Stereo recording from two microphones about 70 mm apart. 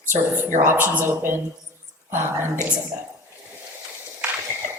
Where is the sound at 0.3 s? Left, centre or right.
Right.